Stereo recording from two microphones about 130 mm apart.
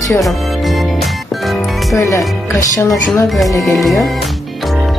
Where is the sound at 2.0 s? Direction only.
20° left (ahead or behind).